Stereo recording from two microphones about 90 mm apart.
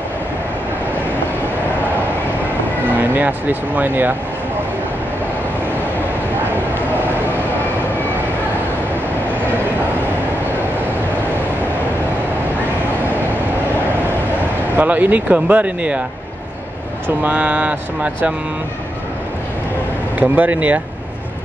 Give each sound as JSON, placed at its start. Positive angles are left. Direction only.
{"t": 3.0, "sound": "speech", "side_deg": -20}
{"t": 14.8, "sound": "speech", "side_deg": -20}
{"t": 17.2, "sound": "speech", "side_deg": -15}
{"t": 20.2, "sound": "speech", "side_deg": -15}